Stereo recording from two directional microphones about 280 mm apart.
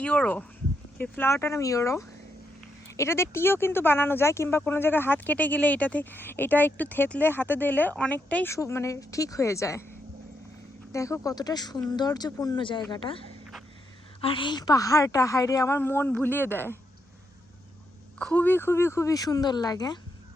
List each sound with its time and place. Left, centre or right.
0.0 s speech: centre
10.9 s speech: centre
18.2 s speech: centre